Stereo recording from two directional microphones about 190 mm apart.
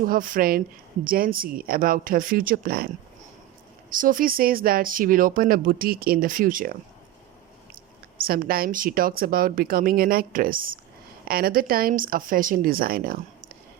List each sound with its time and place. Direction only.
0.0 s speech: 45° right (ahead or behind)
8.2 s speech: 50° right (ahead or behind)